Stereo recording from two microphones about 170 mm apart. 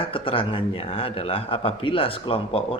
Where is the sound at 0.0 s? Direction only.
30° left (ahead or behind).